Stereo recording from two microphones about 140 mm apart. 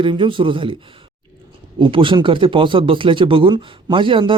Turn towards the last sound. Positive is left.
turn(degrees=-35)  # may be behind; listen again after turning